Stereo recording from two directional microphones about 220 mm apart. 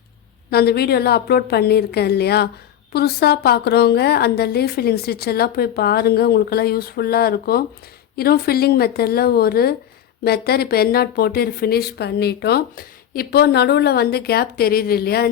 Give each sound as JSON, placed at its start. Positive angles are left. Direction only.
{"t": 0.5, "sound": "a woman's voice", "side_deg": 45}